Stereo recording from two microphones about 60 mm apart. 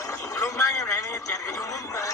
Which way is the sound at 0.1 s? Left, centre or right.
Left.